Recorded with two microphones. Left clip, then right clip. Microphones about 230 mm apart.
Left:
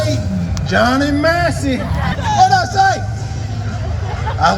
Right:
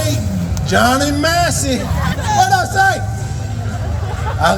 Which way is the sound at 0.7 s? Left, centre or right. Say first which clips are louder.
Right 1 dB; right.